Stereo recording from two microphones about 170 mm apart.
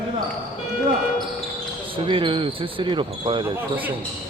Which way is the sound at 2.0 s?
30° right (ahead or behind).